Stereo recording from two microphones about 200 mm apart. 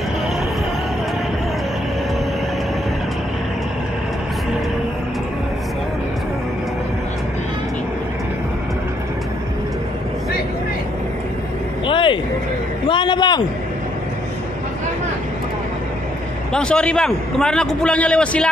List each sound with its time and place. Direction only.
11.8 s vehicle: 25° left (ahead or behind)
12.8 s a sound: 25° left (ahead or behind)
16.5 s a man's voice: 5° left (ahead or behind)